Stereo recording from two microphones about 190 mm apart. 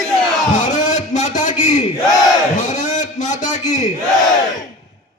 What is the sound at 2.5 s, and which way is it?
Crowd, 40° left (ahead or behind).